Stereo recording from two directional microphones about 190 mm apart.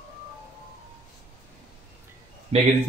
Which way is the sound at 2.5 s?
30° right (ahead or behind).